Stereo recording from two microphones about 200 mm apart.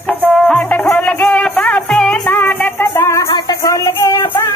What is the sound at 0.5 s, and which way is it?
Music, 5° left (ahead or behind).